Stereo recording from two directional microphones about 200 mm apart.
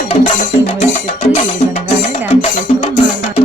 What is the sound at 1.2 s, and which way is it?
Music, 30° left (ahead or behind).